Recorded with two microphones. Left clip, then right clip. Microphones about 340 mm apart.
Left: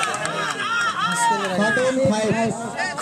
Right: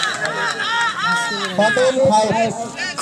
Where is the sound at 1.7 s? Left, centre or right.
Right.